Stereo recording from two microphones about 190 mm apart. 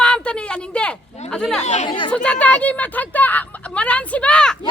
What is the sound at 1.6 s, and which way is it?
Speech, 35° left (ahead or behind).